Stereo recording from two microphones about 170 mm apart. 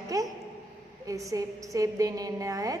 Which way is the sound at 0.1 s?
20° right (ahead or behind).